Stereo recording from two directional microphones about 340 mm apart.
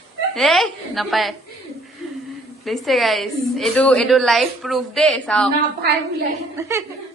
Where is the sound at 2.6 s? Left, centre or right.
Centre.